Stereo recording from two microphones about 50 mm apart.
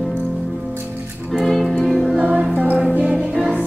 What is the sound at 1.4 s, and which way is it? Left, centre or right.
Music, centre.